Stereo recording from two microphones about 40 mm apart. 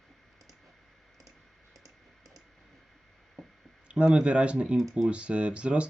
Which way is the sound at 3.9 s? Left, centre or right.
Right.